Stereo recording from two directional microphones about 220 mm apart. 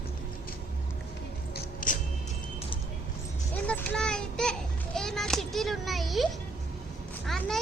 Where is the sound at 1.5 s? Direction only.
40° left (ahead or behind).